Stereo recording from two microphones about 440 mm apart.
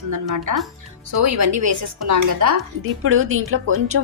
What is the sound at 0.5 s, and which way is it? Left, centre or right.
A woman's voice, right.